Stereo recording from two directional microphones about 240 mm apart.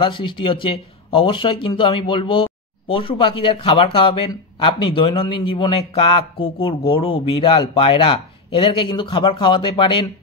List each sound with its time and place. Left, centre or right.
0.0 s speech: left